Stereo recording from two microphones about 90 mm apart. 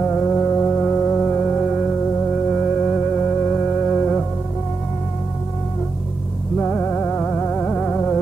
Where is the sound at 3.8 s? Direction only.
10° left (ahead or behind).